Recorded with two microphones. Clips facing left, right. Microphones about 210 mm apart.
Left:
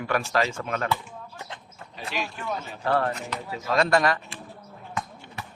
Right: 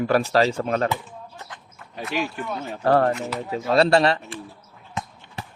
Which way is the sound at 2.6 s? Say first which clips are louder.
Right 7 dB; 45° right (ahead or behind).